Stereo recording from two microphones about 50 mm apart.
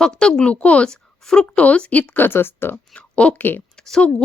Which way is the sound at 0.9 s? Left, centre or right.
Centre.